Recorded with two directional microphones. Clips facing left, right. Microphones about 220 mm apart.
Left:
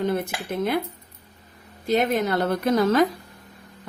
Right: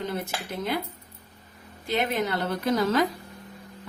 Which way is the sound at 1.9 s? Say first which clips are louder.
Left 5 dB; 45° left (ahead or behind).